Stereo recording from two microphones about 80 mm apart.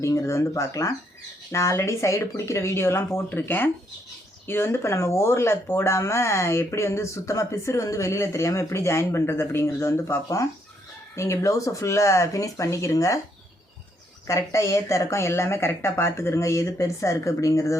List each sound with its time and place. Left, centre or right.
0.0 s speech: left
14.3 s speech: left